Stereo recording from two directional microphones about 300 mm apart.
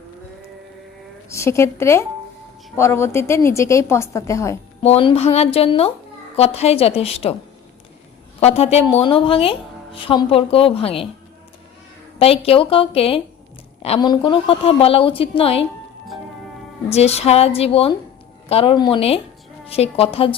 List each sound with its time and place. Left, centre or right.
1.3 s a woman's voice: centre
8.4 s a woman's voice: left
12.2 s a woman's voice: centre
16.9 s a woman's voice: left